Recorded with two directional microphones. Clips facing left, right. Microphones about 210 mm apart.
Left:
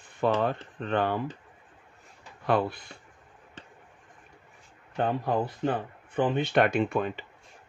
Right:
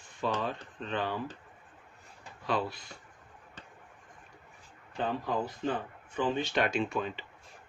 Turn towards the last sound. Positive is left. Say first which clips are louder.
# left 5 dB
turn(degrees=55)  # may be behind; listen again after turning